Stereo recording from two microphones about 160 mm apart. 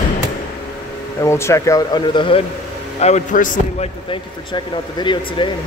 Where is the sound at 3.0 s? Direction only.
50° left (ahead or behind).